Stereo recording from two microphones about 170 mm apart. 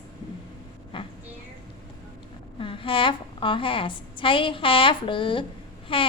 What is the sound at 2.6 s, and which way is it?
A woman's voice, 30° left (ahead or behind).